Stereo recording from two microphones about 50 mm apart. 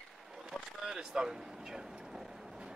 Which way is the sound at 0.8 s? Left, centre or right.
Centre.